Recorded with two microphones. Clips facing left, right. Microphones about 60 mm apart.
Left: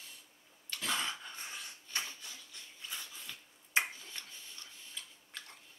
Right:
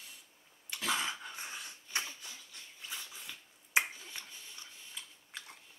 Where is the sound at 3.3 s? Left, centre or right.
Centre.